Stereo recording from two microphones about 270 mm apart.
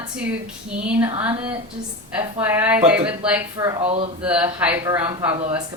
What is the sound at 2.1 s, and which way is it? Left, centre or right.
Speech, centre.